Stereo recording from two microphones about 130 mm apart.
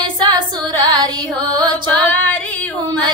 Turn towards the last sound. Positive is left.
turn(degrees=-35)  # may be behind; listen again after turning